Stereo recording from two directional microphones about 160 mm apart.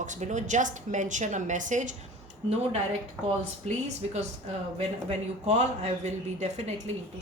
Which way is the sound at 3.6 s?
45° right (ahead or behind).